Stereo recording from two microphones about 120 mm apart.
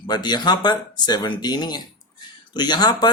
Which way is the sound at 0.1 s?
35° left (ahead or behind).